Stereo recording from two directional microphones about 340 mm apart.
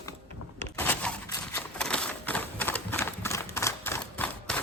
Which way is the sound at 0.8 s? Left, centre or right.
Centre.